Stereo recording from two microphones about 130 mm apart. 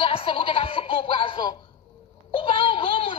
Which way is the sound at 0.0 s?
45° left (ahead or behind).